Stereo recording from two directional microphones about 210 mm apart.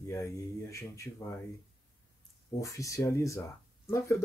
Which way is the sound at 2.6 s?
15° left (ahead or behind).